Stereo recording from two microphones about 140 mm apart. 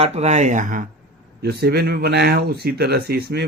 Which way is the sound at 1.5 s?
90° right.